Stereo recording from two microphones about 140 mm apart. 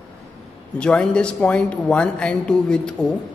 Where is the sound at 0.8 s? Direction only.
5° left (ahead or behind).